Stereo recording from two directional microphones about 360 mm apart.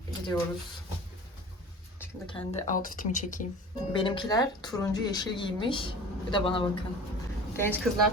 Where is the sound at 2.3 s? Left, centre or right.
Centre.